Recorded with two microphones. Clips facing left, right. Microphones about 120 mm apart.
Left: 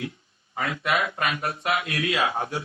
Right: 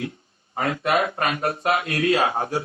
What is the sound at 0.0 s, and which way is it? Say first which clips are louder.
Speech: right 3 dB; 40° right (ahead or behind).